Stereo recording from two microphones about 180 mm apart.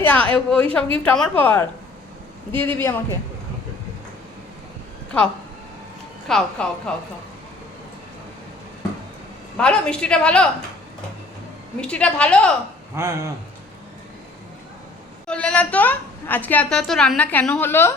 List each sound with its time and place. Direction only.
0.0 s a woman's voice: 10° left (ahead or behind)
6.2 s a woman's voice: 5° left (ahead or behind)
9.6 s a woman's voice: 5° left (ahead or behind)
11.8 s a woman's voice: 5° left (ahead or behind)
13.0 s a man's voice: 15° right (ahead or behind)
15.3 s a woman's voice: 5° left (ahead or behind)